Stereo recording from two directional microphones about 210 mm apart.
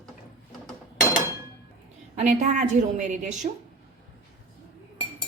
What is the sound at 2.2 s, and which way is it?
A woman's voice, 35° right (ahead or behind).